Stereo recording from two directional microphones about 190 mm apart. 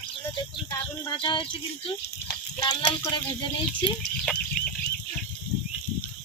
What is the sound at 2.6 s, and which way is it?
Speech, 20° left (ahead or behind).